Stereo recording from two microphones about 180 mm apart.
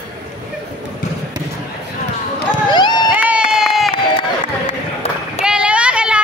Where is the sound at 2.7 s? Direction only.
25° left (ahead or behind).